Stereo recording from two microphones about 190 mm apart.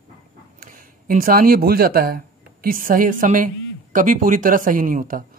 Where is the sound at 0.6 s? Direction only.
50° right (ahead or behind).